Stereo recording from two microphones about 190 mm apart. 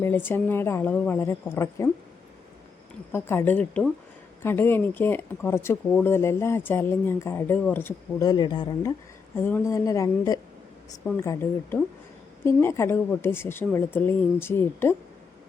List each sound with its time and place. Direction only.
0.0 s speech: 10° left (ahead or behind)
3.1 s speech: 10° left (ahead or behind)
9.3 s speech: 10° left (ahead or behind)